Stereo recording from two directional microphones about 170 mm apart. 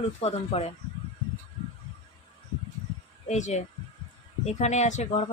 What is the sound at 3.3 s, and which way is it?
Speech, 40° left (ahead or behind).